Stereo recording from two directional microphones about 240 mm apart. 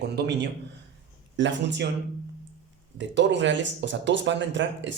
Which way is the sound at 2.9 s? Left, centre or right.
Right.